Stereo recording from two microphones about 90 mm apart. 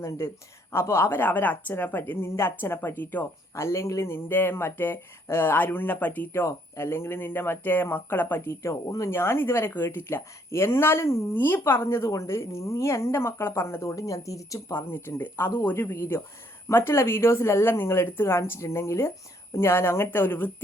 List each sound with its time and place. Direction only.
0.7 s a woman's voice: 30° left (ahead or behind)
3.5 s a woman's voice: 30° left (ahead or behind)
9.0 s a woman's voice: 30° left (ahead or behind)
14.8 s a woman's voice: 25° left (ahead or behind)